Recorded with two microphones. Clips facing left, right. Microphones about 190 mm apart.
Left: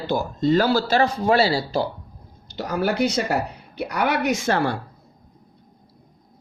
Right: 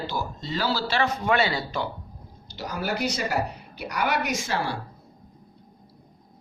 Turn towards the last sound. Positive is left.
turn(degrees=55)  # may be behind; listen again after turning